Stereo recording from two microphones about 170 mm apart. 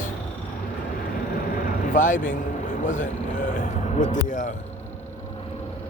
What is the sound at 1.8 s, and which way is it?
Speech, 50° left (ahead or behind).